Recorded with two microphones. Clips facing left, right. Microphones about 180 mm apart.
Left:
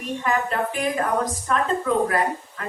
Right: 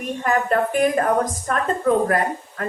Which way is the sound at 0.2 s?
50° right (ahead or behind).